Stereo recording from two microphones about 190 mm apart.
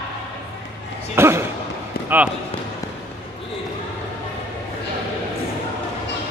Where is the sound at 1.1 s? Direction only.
15° right (ahead or behind).